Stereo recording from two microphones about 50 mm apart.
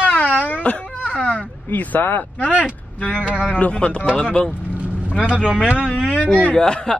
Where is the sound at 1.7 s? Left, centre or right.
Left.